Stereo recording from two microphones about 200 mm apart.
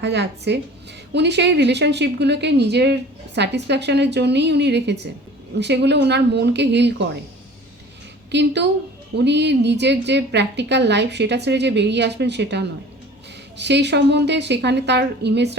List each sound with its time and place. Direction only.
0.0 s a woman's voice: 60° right (ahead or behind)
8.3 s a woman's voice: 60° right (ahead or behind)